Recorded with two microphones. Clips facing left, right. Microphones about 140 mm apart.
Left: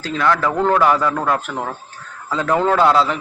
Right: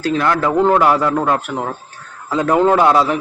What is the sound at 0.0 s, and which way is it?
A man's voice, 15° right (ahead or behind).